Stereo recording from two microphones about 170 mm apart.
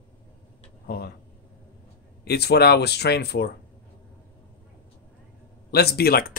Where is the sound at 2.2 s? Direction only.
70° left (ahead or behind).